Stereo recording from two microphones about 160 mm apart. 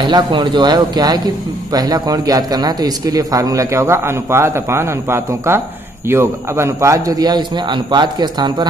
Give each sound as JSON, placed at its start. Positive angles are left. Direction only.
{"t": 0.0, "sound": "a man's voice", "side_deg": -30}